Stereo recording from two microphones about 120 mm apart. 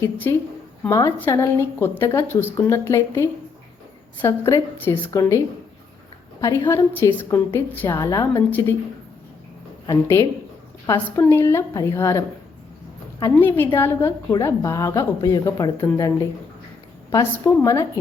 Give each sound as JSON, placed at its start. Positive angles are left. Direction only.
{"t": 0.0, "sound": "a woman's voice", "side_deg": 20}
{"t": 6.4, "sound": "a woman's voice", "side_deg": 25}
{"t": 9.9, "sound": "a woman's voice", "side_deg": 20}
{"t": 13.4, "sound": "a woman's voice", "side_deg": 15}